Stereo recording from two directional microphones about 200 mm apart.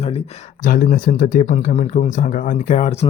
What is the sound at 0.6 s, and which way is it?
Speech, 45° left (ahead or behind).